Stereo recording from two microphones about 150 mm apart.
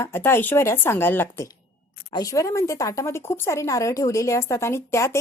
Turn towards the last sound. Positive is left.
turn(degrees=20)  # may be behind; listen again after turning